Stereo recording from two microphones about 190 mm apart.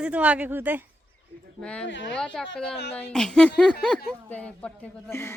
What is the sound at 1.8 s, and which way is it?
Speech, 70° left (ahead or behind).